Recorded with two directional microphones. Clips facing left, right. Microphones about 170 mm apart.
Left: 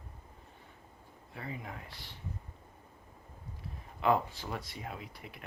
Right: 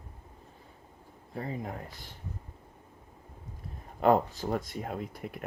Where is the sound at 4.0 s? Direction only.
45° right (ahead or behind).